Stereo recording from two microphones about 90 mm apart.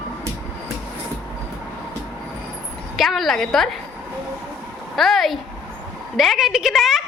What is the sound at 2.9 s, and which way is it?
Speech, centre (ahead or behind).